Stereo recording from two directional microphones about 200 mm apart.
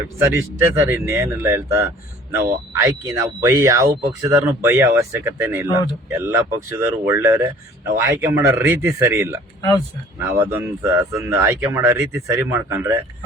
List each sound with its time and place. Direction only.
0.3 s speech: 15° right (ahead or behind)
9.6 s speech: 20° left (ahead or behind)
10.4 s speech: 15° right (ahead or behind)